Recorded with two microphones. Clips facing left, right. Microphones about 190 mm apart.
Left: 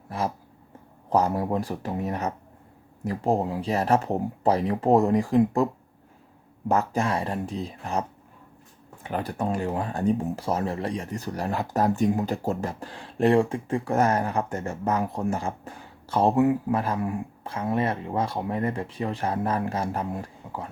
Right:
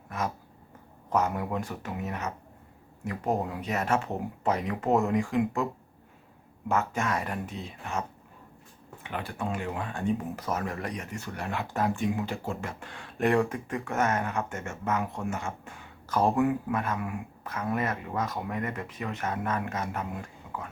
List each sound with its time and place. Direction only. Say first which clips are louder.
0.1 s speech: left 4 dB; 30° left (ahead or behind)
6.7 s speech: left 4 dB; 35° left (ahead or behind)
9.0 s speech: left 6 dB; 40° left (ahead or behind)